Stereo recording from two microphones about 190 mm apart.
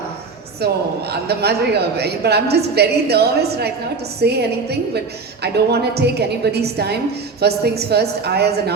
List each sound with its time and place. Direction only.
0.6 s a woman's voice: 60° right (ahead or behind)